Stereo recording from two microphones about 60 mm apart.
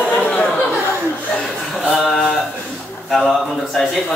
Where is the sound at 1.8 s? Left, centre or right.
Centre.